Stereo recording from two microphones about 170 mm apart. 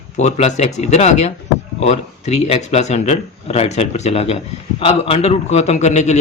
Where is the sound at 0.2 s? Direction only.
40° left (ahead or behind).